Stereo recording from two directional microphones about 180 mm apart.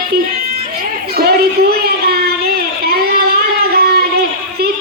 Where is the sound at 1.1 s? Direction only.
60° right (ahead or behind).